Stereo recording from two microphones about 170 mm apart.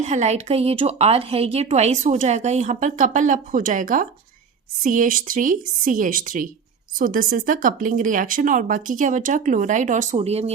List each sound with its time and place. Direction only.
0.0 s speech: 40° right (ahead or behind)